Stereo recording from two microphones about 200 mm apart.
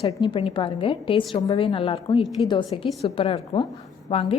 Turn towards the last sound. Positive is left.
turn(degrees=30)  # may be behind; listen again after turning